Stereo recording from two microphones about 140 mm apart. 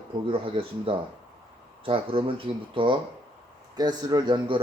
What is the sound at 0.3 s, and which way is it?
Speech, 40° right (ahead or behind).